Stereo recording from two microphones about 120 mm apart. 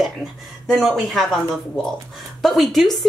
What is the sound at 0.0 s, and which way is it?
Speech, centre (ahead or behind).